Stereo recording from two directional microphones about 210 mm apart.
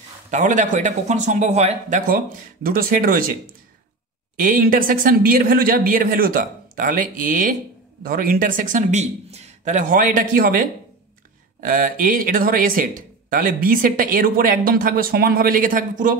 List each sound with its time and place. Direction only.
0.3 s speech: 35° right (ahead or behind)